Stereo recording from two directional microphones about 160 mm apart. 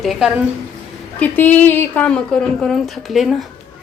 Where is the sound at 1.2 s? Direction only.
10° left (ahead or behind).